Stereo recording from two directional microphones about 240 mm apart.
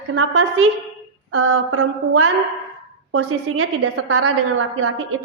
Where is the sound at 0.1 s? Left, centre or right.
Right.